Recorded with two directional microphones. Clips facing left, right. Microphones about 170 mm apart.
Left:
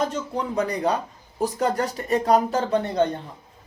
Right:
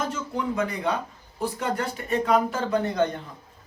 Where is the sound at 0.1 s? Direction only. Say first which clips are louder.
Left 1 dB; 35° left (ahead or behind).